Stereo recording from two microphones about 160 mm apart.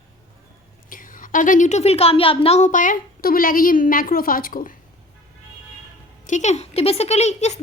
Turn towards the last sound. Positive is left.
turn(degrees=45)  # may be behind; listen again after turning